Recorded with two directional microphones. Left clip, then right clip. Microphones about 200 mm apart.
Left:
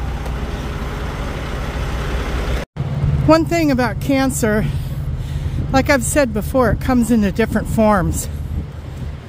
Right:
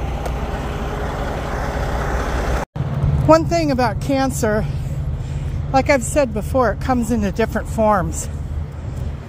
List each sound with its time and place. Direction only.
3.3 s speech: 40° left (ahead or behind)
5.8 s speech: 25° left (ahead or behind)
6.5 s speech: 45° left (ahead or behind)